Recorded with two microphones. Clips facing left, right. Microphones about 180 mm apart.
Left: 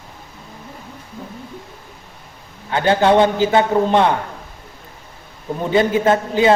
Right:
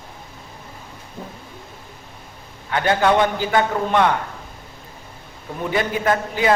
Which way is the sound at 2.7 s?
25° left (ahead or behind).